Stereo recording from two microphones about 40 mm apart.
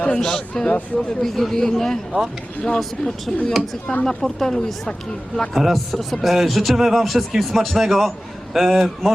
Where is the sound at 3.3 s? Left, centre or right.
Centre.